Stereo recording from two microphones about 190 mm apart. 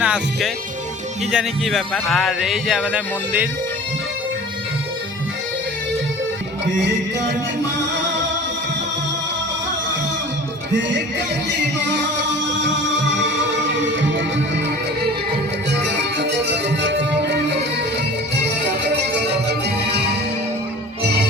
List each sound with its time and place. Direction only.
0.0 s speech: centre (ahead or behind)
12.5 s music: 70° right (ahead or behind)
14.2 s music: 70° right (ahead or behind)
15.8 s music: 65° right (ahead or behind)
19.3 s music: 60° right (ahead or behind)